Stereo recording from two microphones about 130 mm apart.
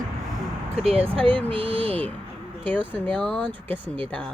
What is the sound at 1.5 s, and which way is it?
Speech, 45° right (ahead or behind).